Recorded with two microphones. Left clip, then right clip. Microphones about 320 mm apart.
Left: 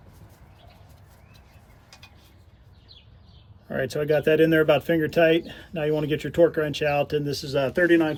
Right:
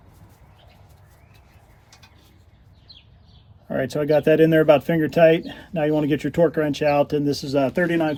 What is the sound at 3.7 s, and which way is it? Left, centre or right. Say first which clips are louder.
Speech: right 3 dB; centre.